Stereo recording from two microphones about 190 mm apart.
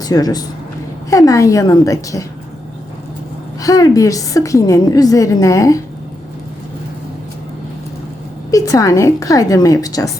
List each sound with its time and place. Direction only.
0.0 s a woman's voice: 20° left (ahead or behind)
3.6 s a woman's voice: 20° left (ahead or behind)
8.4 s a woman's voice: 15° left (ahead or behind)